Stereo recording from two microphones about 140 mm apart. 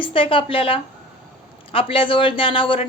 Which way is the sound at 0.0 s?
40° left (ahead or behind).